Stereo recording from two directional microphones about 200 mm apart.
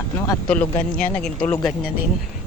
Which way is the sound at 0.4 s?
10° left (ahead or behind).